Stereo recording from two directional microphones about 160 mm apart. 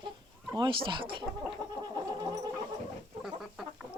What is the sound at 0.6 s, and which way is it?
Speech, 30° right (ahead or behind).